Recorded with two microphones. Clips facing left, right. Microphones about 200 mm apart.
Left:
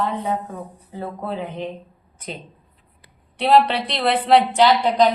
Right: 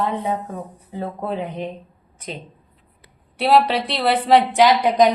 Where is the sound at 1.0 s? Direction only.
20° right (ahead or behind).